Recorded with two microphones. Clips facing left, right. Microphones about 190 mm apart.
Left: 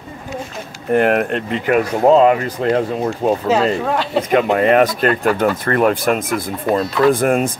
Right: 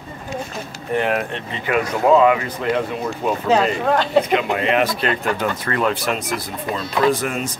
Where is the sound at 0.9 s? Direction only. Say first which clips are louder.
Left 6 dB; 50° left (ahead or behind).